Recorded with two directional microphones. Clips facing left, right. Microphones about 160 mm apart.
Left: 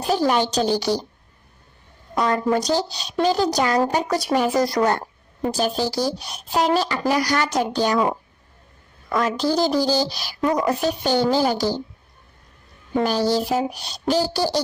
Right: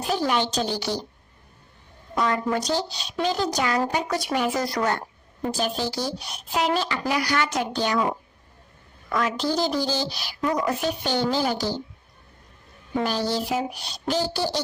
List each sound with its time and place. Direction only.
0.1 s a woman's voice: 40° left (ahead or behind)
2.1 s a woman's voice: 35° left (ahead or behind)
9.0 s a woman's voice: 40° left (ahead or behind)
12.9 s a woman's voice: 40° left (ahead or behind)